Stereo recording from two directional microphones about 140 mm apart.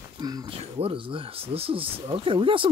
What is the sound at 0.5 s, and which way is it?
Speech, 40° right (ahead or behind).